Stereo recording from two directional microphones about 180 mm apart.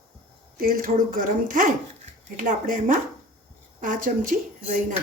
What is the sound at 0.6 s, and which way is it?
Speech, 50° right (ahead or behind).